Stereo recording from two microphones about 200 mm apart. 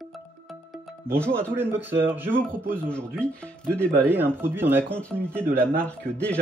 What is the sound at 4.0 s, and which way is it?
Speech, 10° right (ahead or behind).